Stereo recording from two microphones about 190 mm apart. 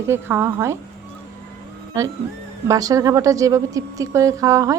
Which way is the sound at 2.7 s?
20° right (ahead or behind).